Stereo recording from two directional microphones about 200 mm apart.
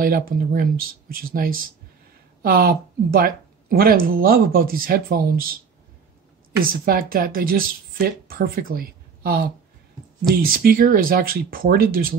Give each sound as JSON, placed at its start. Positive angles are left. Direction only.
{"t": 0.0, "sound": "speech", "side_deg": -45}
{"t": 6.7, "sound": "speech", "side_deg": -45}